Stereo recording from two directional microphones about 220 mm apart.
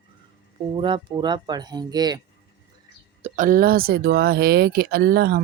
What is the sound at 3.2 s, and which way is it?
Speech, 35° right (ahead or behind).